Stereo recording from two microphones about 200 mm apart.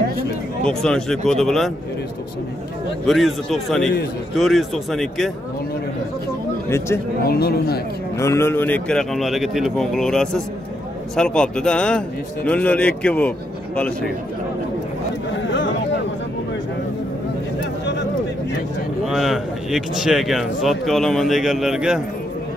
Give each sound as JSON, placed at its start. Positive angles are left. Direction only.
{"t": 0.7, "sound": "speech", "side_deg": 5}
{"t": 3.1, "sound": "speech", "side_deg": 0}
{"t": 7.2, "sound": "speech", "side_deg": 50}
{"t": 8.2, "sound": "speech", "side_deg": 15}
{"t": 19.0, "sound": "speech", "side_deg": 0}